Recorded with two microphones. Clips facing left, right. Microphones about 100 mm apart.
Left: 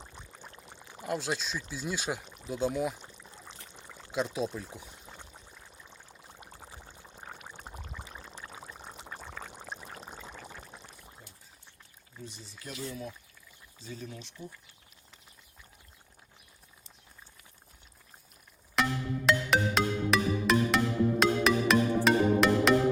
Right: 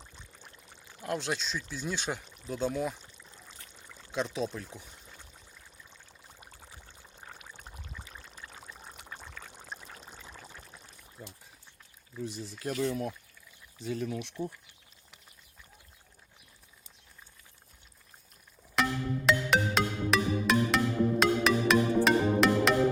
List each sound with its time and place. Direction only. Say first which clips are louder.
1.0 s speech: even; 5° left (ahead or behind)
4.1 s speech: left 1 dB; 5° left (ahead or behind)
6.4 s pour: left 4 dB; 30° left (ahead or behind)
8.5 s pour: left 3 dB; 15° left (ahead or behind)
9.8 s pour: left 4 dB; 35° left (ahead or behind)
12.3 s speech: right 10 dB; 55° right (ahead or behind)
18.8 s music: even; centre (ahead or behind)